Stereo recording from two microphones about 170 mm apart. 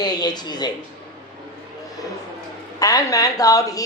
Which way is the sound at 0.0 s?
25° left (ahead or behind).